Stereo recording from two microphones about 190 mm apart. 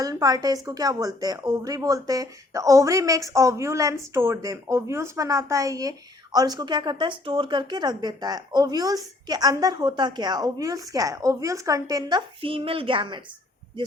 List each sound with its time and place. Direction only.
0.0 s a woman's voice: 20° right (ahead or behind)